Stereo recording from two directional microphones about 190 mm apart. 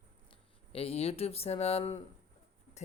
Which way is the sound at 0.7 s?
30° left (ahead or behind).